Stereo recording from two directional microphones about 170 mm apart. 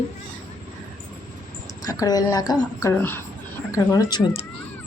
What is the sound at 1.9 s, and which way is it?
A woman's voice, 20° left (ahead or behind).